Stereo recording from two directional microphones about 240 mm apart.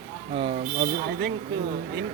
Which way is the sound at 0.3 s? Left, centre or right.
Right.